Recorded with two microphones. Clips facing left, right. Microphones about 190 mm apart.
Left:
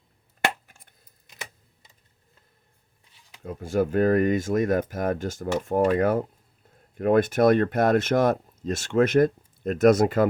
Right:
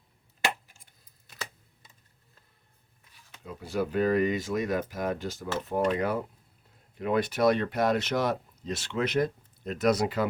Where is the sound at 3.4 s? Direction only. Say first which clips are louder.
Left 6 dB; 50° left (ahead or behind).